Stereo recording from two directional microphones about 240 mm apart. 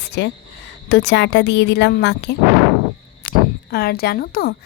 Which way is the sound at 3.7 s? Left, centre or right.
Left.